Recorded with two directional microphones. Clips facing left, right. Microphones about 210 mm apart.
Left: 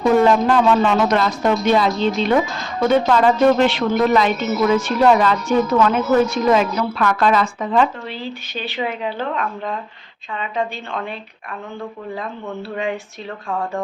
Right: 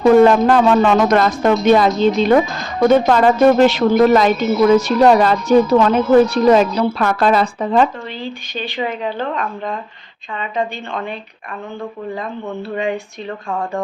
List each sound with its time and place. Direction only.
0.3 s speech: 50° right (ahead or behind)
8.2 s speech: 5° left (ahead or behind)
12.7 s speech: centre (ahead or behind)